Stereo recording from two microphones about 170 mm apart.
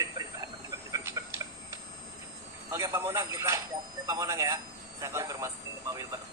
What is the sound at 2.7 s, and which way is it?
A man's voice, 15° right (ahead or behind).